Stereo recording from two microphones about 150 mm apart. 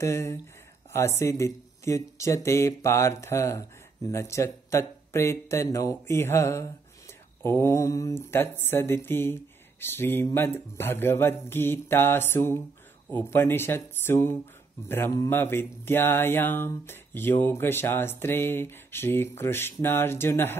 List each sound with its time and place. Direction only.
0.0 s speech: 20° left (ahead or behind)